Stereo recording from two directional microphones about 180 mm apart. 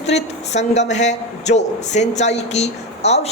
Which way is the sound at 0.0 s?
40° left (ahead or behind).